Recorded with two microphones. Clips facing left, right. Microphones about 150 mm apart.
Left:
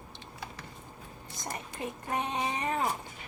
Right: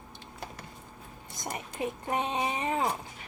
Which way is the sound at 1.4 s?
20° right (ahead or behind).